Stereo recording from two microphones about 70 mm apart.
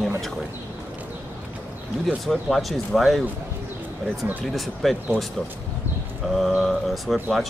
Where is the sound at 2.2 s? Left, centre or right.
Centre.